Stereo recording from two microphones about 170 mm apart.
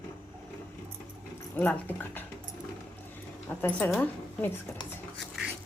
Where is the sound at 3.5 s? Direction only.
10° left (ahead or behind).